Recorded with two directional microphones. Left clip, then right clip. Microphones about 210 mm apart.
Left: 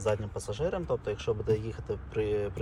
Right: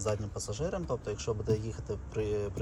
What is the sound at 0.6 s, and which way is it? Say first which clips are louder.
Speech: left 4 dB; 10° right (ahead or behind).